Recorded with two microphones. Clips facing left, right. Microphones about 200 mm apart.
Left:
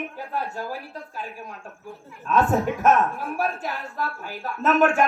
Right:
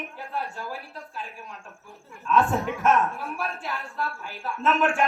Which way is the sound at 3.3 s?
40° left (ahead or behind).